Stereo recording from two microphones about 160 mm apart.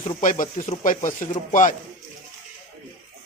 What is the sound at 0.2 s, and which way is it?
Speech, 55° left (ahead or behind).